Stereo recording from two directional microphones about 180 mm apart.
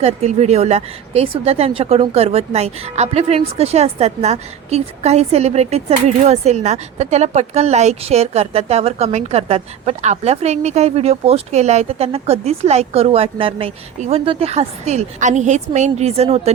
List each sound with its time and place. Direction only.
0.0 s speech: 35° right (ahead or behind)